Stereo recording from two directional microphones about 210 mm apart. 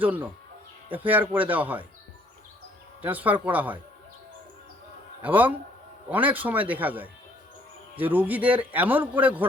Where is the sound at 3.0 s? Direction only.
10° right (ahead or behind).